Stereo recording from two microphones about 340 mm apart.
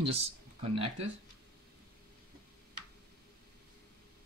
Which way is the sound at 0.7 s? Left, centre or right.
Centre.